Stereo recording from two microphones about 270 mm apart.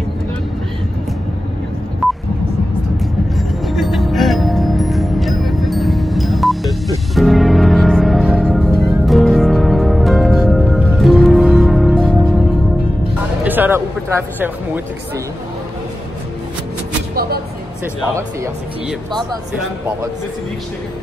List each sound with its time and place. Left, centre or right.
2.0 s telephone dialing: centre
3.3 s music: centre
13.4 s music: centre
17.1 s a sound: right
18.4 s speech: centre